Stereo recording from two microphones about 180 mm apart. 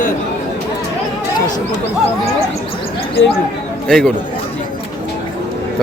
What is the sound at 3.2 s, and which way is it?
Speech, 90° left.